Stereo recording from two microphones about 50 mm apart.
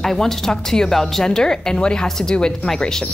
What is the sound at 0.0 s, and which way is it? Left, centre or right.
A woman's voice, centre.